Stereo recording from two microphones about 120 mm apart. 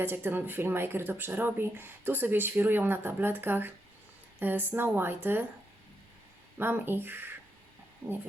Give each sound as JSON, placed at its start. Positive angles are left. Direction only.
{"t": 0.0, "sound": "speech", "side_deg": -15}
{"t": 6.6, "sound": "speech", "side_deg": -20}